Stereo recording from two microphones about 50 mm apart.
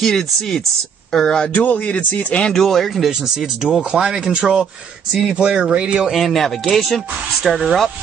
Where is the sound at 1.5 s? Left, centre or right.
Left.